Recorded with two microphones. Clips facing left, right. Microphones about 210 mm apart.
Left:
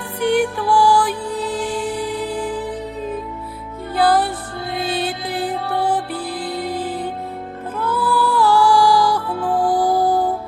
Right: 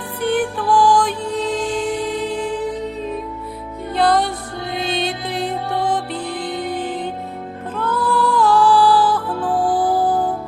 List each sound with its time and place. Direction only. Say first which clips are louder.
0.2 s music: left 2 dB; 10° left (ahead or behind)
2.0 s music: right 1 dB; 20° right (ahead or behind)
2.2 s music: right 1 dB; 5° left (ahead or behind)
3.9 s music: even; 5° left (ahead or behind)